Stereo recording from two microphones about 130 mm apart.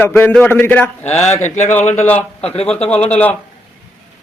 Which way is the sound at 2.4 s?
50° left (ahead or behind).